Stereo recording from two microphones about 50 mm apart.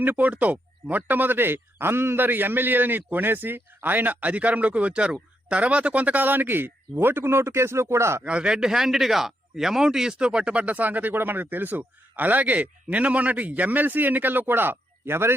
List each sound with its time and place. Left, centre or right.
0.0 s speech: right
8.2 s speech: right